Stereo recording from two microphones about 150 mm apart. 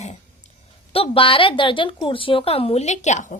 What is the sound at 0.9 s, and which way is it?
A woman's voice, 40° left (ahead or behind).